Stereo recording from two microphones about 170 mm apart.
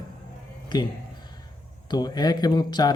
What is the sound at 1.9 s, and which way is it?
Speech, 25° left (ahead or behind).